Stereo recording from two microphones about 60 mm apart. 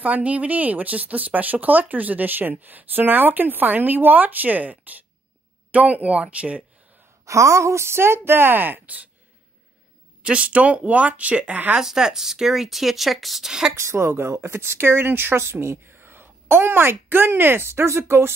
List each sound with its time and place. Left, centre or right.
0.0 s speech: right
7.2 s a woman's voice: right
10.2 s speech: centre
11.8 s speech: centre
13.7 s speech: right